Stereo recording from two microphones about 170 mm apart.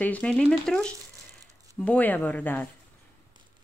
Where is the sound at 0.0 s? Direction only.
10° left (ahead or behind).